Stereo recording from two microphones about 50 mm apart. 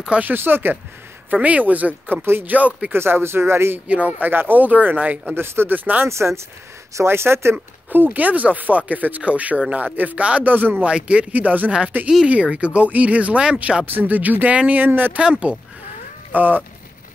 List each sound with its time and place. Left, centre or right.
0.3 s speech: right
1.3 s speech: right
2.9 s speech: right
3.8 s speech: right
4.3 s speech: right
5.3 s speech: right
6.0 s speech: right
7.9 s speech: right
10.9 s speech: right
11.3 s speech: right
12.3 s speech: right
13.8 s speech: right
15.1 s speech: right
16.3 s speech: right